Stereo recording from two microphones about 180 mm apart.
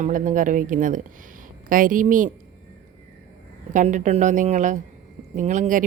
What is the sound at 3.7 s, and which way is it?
A woman's voice, 45° right (ahead or behind).